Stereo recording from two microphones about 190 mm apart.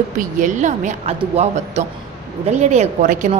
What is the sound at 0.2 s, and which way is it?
A woman's voice, 40° right (ahead or behind).